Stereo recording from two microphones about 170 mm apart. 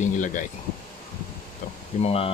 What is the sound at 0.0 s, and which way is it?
Speech, 45° left (ahead or behind).